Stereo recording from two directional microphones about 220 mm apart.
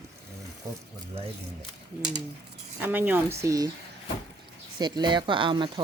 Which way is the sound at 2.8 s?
10° right (ahead or behind).